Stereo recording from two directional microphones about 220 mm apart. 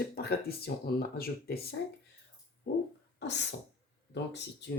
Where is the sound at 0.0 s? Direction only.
45° left (ahead or behind).